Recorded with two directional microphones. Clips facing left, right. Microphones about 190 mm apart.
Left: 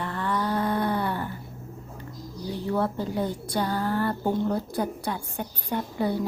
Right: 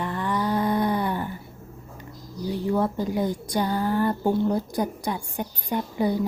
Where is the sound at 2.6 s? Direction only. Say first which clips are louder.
Right 2 dB; 15° right (ahead or behind).